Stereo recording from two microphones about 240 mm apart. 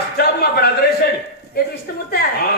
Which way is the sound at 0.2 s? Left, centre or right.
Left.